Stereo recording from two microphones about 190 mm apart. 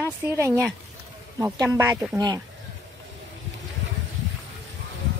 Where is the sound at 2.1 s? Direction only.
20° right (ahead or behind).